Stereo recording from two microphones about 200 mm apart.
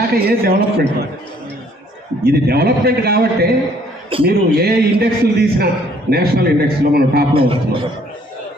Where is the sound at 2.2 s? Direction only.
50° right (ahead or behind).